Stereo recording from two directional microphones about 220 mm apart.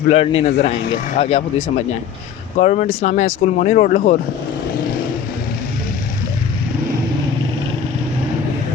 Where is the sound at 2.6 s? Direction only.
35° left (ahead or behind).